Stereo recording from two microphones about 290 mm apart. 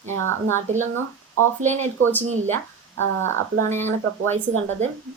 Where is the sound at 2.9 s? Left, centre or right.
Right.